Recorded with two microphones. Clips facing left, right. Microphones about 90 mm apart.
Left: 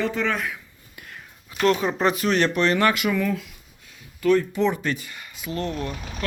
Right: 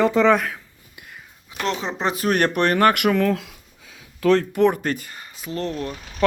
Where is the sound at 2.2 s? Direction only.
50° right (ahead or behind).